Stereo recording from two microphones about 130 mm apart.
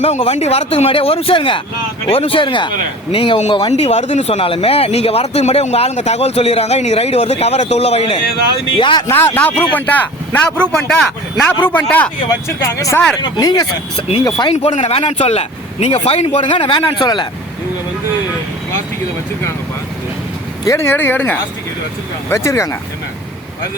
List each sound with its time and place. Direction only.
0.0 s speech: 50° left (ahead or behind)
3.7 s speech: 55° left (ahead or behind); by 9.0 s 40° left (ahead or behind)
9.0 s speech: 20° left (ahead or behind)
12.3 s speech: 20° left (ahead or behind)
14.5 s speech: 60° left (ahead or behind); by 17.2 s 40° left (ahead or behind)
20.7 s speech: 20° left (ahead or behind)
22.4 s speech: 20° left (ahead or behind)